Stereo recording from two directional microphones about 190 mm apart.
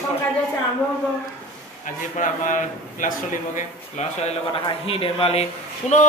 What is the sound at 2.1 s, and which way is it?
A man's voice, 40° left (ahead or behind).